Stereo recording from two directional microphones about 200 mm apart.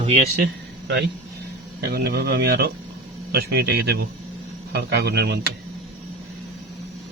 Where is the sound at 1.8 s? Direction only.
50° right (ahead or behind).